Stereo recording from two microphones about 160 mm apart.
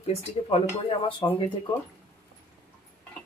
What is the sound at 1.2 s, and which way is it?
Speech, 25° left (ahead or behind).